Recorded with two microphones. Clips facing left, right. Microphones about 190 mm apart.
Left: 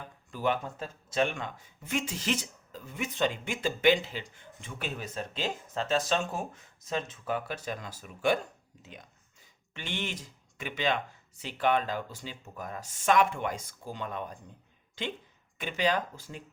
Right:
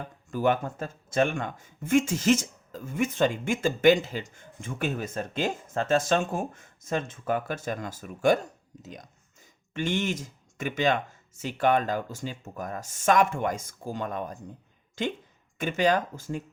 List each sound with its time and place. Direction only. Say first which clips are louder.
0.0 s speech: right 5 dB; 45° right (ahead or behind)